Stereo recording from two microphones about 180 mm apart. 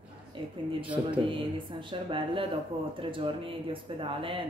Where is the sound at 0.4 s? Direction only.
30° right (ahead or behind).